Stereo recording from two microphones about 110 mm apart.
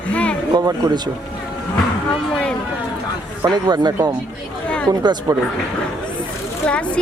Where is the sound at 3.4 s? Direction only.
40° right (ahead or behind).